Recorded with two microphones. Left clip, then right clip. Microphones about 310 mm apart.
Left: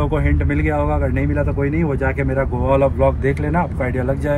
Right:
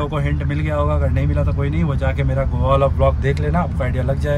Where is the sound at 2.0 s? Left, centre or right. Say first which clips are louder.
Even; right.